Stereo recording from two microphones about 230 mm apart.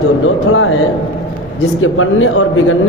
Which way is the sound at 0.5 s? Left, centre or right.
Left.